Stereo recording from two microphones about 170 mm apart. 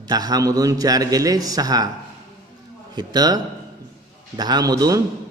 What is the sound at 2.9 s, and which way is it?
A man's voice, 25° right (ahead or behind).